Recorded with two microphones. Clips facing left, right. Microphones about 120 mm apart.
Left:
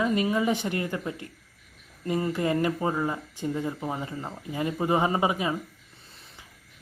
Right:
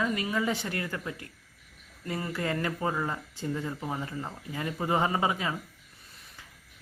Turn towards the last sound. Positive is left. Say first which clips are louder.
# left 3 dB
turn(degrees=20)  # may be behind; listen again after turning